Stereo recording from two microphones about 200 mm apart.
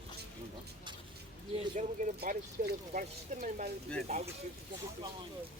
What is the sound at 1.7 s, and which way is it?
Speech, 40° right (ahead or behind).